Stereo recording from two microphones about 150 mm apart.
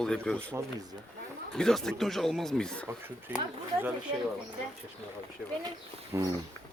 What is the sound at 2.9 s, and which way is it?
Speech, 15° right (ahead or behind).